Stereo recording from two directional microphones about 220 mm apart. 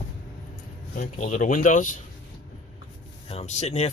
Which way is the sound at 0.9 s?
35° left (ahead or behind).